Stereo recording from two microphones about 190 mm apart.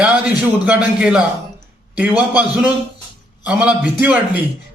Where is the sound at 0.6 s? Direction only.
10° right (ahead or behind).